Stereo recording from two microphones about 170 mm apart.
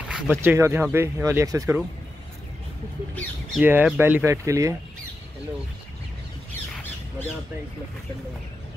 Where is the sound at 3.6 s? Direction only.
10° right (ahead or behind).